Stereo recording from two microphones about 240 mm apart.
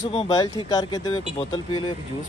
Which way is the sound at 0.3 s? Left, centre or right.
Centre.